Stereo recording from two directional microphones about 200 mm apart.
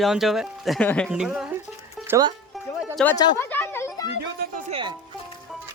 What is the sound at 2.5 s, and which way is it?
Music, centre (ahead or behind).